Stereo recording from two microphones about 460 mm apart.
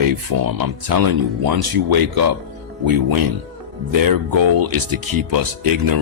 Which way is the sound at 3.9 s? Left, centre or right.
Right.